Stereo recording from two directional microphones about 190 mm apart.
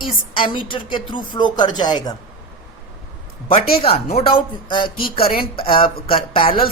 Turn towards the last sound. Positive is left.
turn(degrees=30)  # may be behind; listen again after turning